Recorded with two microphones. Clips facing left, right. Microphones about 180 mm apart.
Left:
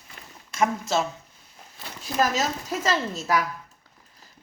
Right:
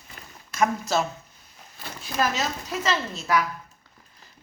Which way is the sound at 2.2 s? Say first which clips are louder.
Left 2 dB; 45° left (ahead or behind).